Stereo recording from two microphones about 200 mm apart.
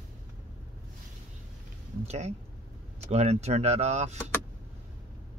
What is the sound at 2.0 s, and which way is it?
Speech, 35° right (ahead or behind).